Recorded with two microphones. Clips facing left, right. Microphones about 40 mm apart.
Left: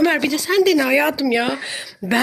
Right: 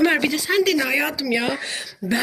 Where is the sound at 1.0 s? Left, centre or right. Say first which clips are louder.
Left 6 dB; left.